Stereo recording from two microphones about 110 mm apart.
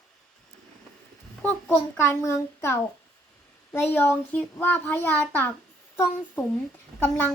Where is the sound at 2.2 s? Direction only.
25° left (ahead or behind).